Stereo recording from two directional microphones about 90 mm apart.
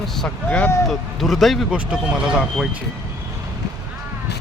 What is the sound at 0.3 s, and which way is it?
Speech, 15° left (ahead or behind).